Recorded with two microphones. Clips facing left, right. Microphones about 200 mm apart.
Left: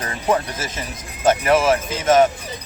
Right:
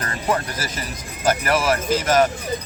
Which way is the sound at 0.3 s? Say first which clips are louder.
Left 3 dB; 20° left (ahead or behind).